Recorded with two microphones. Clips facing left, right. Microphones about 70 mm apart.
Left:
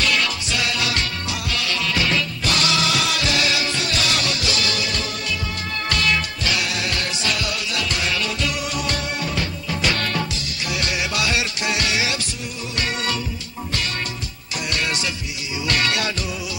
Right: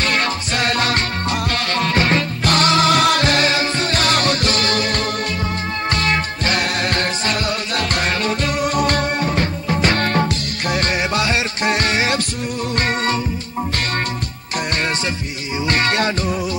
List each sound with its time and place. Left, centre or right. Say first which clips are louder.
0.0 s music: right 3 dB; right
15.6 s music: right 4 dB; right